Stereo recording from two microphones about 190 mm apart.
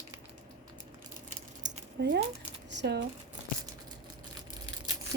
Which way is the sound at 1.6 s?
65° right (ahead or behind).